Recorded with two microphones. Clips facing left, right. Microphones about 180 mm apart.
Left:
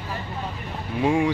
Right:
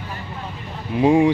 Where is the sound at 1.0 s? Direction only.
20° right (ahead or behind).